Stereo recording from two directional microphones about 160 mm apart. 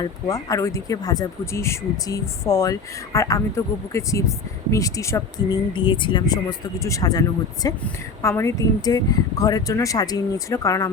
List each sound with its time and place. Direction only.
0.0 s speech: 20° left (ahead or behind)